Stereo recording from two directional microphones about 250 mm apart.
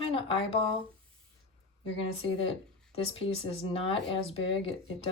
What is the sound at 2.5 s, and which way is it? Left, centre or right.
Speech, left.